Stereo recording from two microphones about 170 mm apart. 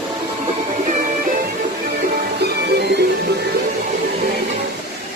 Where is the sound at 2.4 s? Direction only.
75° right (ahead or behind).